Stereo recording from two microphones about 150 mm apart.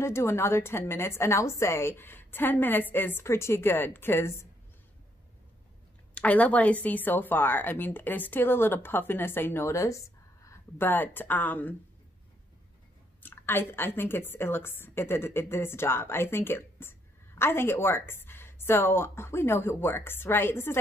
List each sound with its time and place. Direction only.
0.0 s a woman's voice: 15° left (ahead or behind)
6.1 s a woman's voice: 10° left (ahead or behind)
13.2 s a woman's voice: 15° left (ahead or behind)